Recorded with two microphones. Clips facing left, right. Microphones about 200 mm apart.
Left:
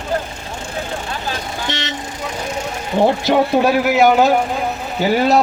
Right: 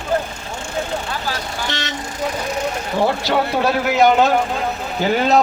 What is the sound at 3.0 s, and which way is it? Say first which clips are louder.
A man's voice: left 4 dB; 15° left (ahead or behind).